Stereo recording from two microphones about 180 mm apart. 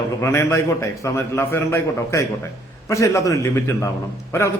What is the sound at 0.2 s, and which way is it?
A man's voice, 15° left (ahead or behind).